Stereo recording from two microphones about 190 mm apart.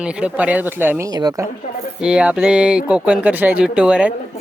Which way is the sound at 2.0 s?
5° right (ahead or behind).